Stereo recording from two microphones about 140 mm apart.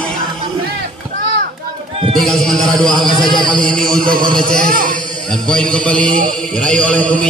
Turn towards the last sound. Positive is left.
turn(degrees=10)  # may be behind; listen again after turning